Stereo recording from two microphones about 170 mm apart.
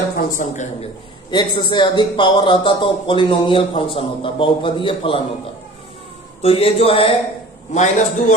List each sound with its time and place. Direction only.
0.2 s a woman's voice: 45° left (ahead or behind)
1.3 s a man's voice: 25° left (ahead or behind)
6.4 s a man's voice: 35° left (ahead or behind)
7.7 s a woman's voice: 45° left (ahead or behind)